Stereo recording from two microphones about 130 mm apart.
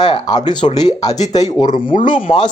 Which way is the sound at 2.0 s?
40° left (ahead or behind).